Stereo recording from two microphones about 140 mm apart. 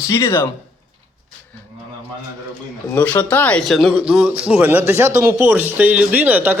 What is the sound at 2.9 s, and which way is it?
A man's voice, 15° left (ahead or behind).